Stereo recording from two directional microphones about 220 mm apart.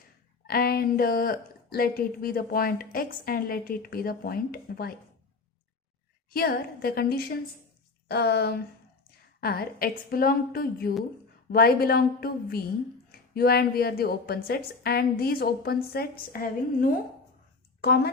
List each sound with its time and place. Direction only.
0.4 s a woman's voice: 45° left (ahead or behind)
6.3 s a woman's voice: 45° left (ahead or behind)